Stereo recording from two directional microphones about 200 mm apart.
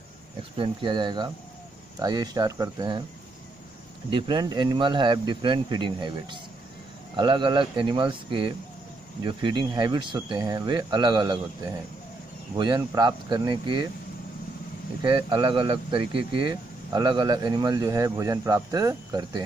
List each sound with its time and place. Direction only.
0.6 s speech: 25° right (ahead or behind)
4.1 s speech: 20° right (ahead or behind)
15.0 s speech: 25° right (ahead or behind)